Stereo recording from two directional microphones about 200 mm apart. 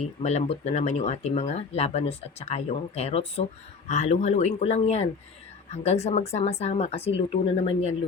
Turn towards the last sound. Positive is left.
turn(degrees=35)  # may be behind; listen again after turning